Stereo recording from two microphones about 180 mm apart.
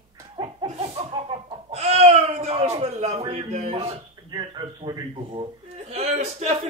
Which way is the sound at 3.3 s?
40° right (ahead or behind).